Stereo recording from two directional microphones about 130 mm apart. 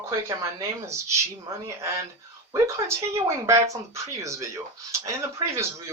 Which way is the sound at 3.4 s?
25° right (ahead or behind).